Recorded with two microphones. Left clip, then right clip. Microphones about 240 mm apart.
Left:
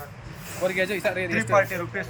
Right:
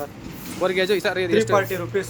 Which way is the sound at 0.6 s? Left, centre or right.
Centre.